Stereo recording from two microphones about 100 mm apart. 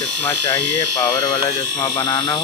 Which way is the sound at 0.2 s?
20° left (ahead or behind).